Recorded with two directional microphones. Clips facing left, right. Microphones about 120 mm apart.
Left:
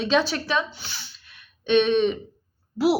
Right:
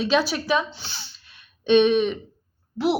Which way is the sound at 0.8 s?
30° right (ahead or behind).